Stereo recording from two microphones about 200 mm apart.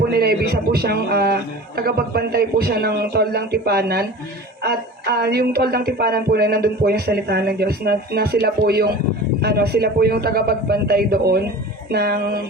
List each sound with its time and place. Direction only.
0.1 s speech: 50° right (ahead or behind)